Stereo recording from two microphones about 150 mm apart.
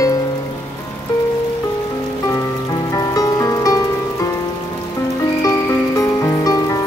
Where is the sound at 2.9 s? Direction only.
25° left (ahead or behind).